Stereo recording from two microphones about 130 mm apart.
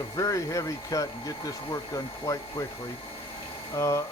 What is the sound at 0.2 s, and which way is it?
Speech, 25° left (ahead or behind).